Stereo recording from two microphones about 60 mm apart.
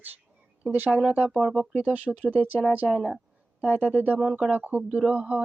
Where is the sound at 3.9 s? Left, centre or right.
Right.